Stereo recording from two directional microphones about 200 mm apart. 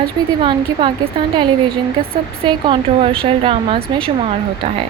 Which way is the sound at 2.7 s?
25° right (ahead or behind).